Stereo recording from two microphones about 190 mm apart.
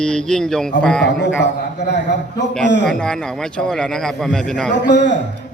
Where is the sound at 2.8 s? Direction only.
5° left (ahead or behind).